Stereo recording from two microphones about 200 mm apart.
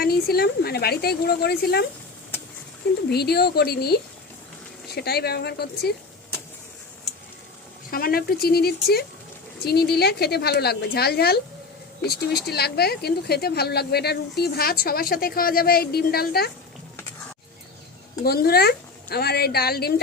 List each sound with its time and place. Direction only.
0.0 s speech: 50° left (ahead or behind)
3.1 s speech: 50° left (ahead or behind)
7.9 s speech: 45° left (ahead or behind)
18.3 s speech: 50° left (ahead or behind)